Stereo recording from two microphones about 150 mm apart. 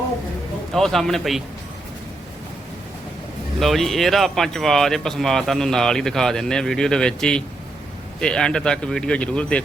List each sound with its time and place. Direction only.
0.7 s speech: centre (ahead or behind)
3.6 s speech: centre (ahead or behind)